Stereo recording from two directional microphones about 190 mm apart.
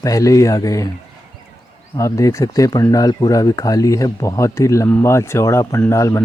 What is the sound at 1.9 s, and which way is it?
Speech, 15° left (ahead or behind).